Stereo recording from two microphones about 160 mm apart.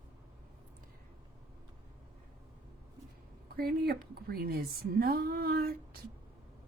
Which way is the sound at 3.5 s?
70° right (ahead or behind).